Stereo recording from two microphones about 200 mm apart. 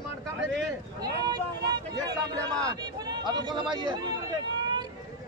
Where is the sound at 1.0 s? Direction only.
20° right (ahead or behind).